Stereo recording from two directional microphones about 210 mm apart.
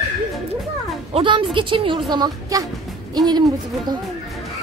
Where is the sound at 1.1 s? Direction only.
25° right (ahead or behind).